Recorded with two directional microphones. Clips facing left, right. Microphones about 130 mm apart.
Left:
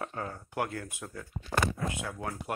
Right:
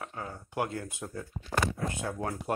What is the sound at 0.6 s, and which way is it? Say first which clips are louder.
Speech: right 1 dB; 25° right (ahead or behind).